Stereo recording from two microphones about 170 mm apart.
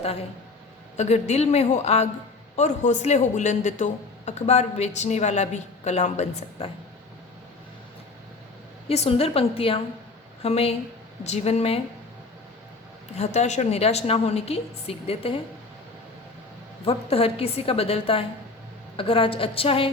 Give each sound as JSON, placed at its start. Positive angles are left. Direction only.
{"t": 0.9, "sound": "a woman's voice", "side_deg": 40}
{"t": 8.9, "sound": "a woman's voice", "side_deg": 35}
{"t": 13.1, "sound": "a woman's voice", "side_deg": 40}
{"t": 16.8, "sound": "a woman's voice", "side_deg": 35}